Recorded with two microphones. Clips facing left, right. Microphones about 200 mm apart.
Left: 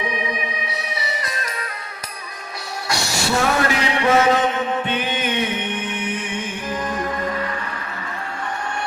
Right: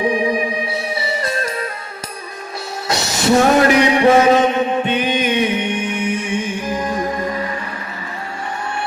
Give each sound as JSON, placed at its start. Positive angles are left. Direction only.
{"t": 0.0, "sound": "music", "side_deg": -30}
{"t": 2.8, "sound": "music", "side_deg": -20}
{"t": 4.0, "sound": "music", "side_deg": -30}